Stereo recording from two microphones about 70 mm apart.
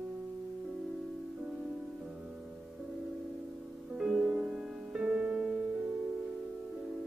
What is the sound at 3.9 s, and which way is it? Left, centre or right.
Music, centre.